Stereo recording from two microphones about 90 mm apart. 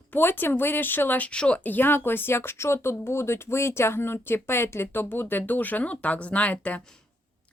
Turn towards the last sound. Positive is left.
turn(degrees=15)  # may be behind; listen again after turning